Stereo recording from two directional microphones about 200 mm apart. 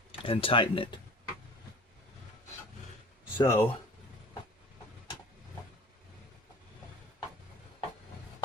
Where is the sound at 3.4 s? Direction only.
15° left (ahead or behind).